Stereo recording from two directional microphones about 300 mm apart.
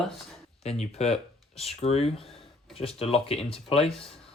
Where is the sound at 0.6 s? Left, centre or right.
Left.